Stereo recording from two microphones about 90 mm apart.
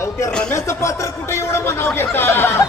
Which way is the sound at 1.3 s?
30° left (ahead or behind).